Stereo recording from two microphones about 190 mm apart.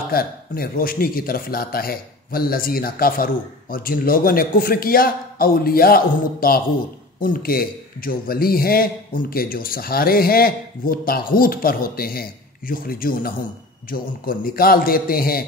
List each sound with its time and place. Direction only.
0.1 s a man's voice: 50° left (ahead or behind)